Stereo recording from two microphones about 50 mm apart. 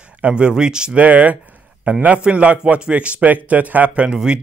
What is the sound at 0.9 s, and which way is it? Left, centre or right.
Speech, right.